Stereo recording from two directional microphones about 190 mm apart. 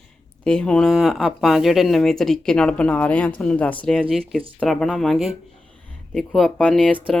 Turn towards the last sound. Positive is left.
turn(degrees=5)  # may be behind; listen again after turning